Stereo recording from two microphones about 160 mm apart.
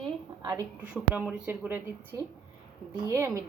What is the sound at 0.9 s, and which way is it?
Speech, 10° right (ahead or behind).